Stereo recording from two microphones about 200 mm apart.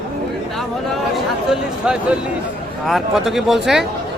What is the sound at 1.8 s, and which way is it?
Speech, 5° right (ahead or behind).